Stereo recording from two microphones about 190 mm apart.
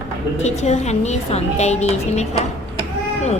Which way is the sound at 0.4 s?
35° left (ahead or behind).